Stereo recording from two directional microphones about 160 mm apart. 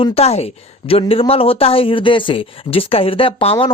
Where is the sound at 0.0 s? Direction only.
40° left (ahead or behind).